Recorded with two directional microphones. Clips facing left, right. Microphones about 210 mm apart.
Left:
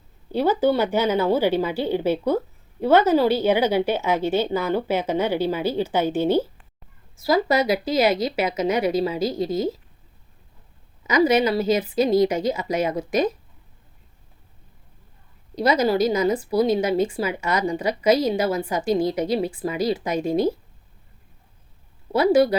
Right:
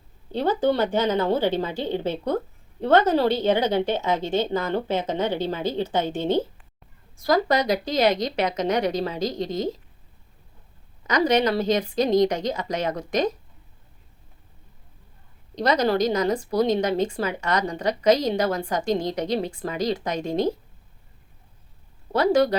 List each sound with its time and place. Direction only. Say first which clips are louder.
0.3 s a woman's voice: left 2 dB; 10° left (ahead or behind)
11.0 s a woman's voice: left 2 dB; 5° left (ahead or behind)
15.5 s a woman's voice: left 2 dB; 10° left (ahead or behind)
22.1 s a woman's voice: left 2 dB; 10° left (ahead or behind)